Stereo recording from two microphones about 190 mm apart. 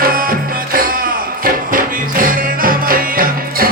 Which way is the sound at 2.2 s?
50° right (ahead or behind).